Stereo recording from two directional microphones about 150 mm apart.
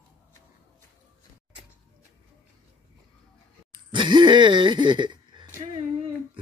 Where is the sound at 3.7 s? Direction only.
30° right (ahead or behind).